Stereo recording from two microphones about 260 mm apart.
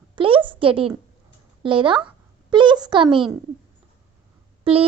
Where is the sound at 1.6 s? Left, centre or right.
Centre.